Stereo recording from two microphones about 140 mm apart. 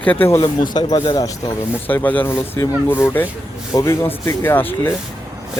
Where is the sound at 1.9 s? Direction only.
15° left (ahead or behind).